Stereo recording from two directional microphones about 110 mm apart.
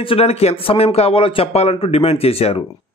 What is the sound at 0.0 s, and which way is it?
A man's voice, 60° left (ahead or behind).